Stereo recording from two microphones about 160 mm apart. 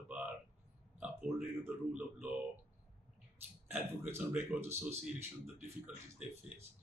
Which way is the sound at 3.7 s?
10° right (ahead or behind).